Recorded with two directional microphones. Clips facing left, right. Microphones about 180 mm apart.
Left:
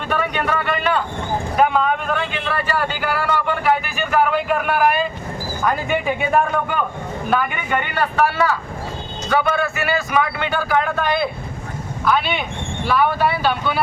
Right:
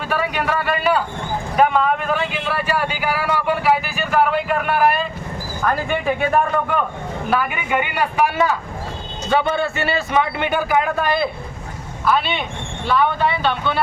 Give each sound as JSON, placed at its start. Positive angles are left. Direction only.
{"t": 0.1, "sound": "a man's voice", "side_deg": -5}